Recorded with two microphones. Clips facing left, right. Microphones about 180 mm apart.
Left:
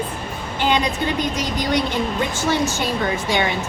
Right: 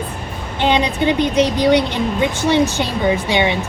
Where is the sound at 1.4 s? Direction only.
70° right (ahead or behind).